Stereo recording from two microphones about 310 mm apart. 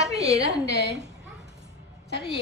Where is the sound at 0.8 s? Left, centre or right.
Right.